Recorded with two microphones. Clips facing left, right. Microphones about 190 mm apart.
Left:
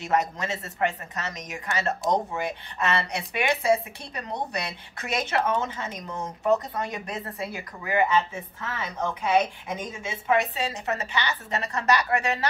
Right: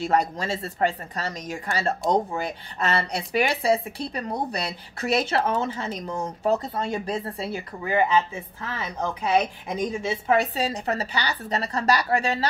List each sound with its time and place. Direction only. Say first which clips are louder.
0.0 s speech: right 2 dB; 30° right (ahead or behind)